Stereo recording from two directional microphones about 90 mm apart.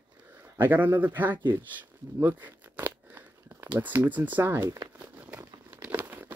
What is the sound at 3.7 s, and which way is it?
Speech, 20° right (ahead or behind).